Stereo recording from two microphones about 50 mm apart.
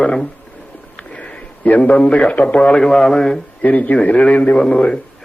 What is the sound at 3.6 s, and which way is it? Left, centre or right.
Speech, left.